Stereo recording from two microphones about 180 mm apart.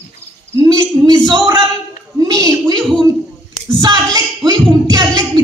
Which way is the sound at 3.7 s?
20° right (ahead or behind).